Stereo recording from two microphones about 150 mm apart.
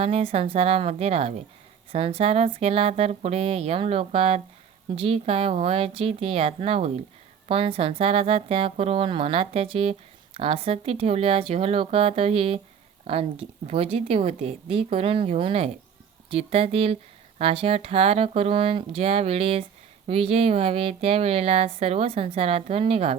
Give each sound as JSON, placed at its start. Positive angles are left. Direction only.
{"t": 0.0, "sound": "a woman's voice", "side_deg": -40}